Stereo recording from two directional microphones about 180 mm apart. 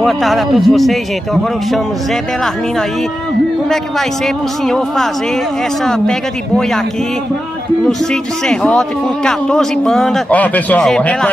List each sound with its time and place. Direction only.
0.0 s speech: centre (ahead or behind)
4.6 s speech: centre (ahead or behind)
8.1 s speech: 5° left (ahead or behind)